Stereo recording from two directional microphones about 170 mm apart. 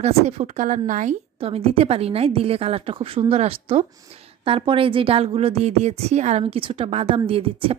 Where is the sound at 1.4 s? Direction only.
35° right (ahead or behind).